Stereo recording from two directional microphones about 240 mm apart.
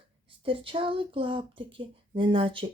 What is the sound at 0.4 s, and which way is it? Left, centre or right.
Speech, right.